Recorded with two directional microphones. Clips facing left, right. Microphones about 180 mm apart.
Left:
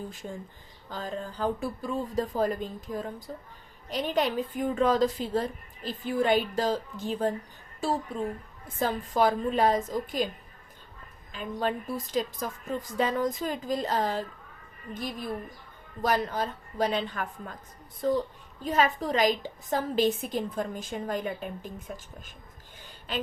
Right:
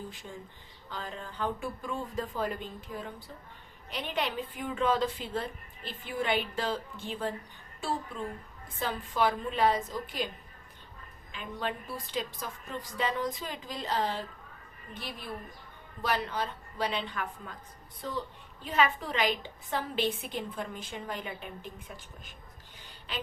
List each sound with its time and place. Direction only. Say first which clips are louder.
0.1 s a woman's voice: left 5 dB; 45° left (ahead or behind)
11.3 s a woman's voice: left 6 dB; 40° left (ahead or behind)
16.0 s a woman's voice: left 4 dB; 45° left (ahead or behind)